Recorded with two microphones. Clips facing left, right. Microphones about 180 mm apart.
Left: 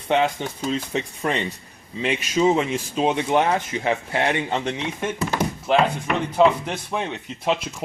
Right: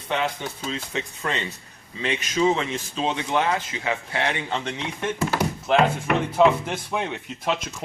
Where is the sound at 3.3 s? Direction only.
30° left (ahead or behind).